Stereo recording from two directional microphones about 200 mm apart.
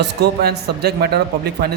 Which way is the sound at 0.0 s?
55° right (ahead or behind).